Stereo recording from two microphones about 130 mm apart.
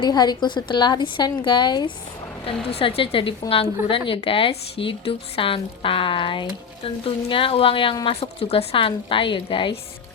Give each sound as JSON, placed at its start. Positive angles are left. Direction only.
{"t": 0.0, "sound": "a woman's voice", "side_deg": 30}
{"t": 2.5, "sound": "speech", "side_deg": 45}